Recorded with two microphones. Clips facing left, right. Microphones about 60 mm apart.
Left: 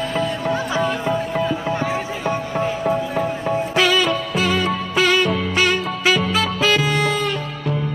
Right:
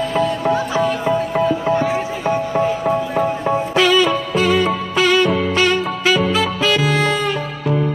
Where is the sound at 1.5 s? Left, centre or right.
Right.